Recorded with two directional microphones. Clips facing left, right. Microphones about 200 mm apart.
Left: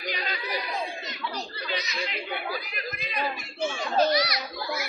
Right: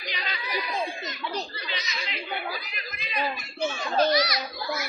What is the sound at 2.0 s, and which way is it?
Speech, 50° left (ahead or behind).